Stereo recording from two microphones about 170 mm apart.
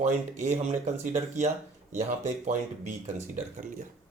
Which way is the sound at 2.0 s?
45° right (ahead or behind).